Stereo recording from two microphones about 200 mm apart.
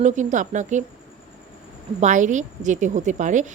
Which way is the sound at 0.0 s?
40° right (ahead or behind).